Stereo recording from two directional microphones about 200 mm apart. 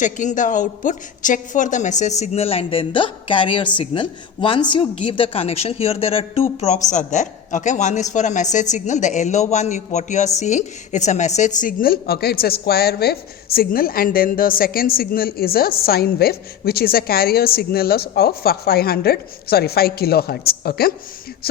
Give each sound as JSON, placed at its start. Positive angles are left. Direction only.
{"t": 0.0, "sound": "a woman's voice", "side_deg": 40}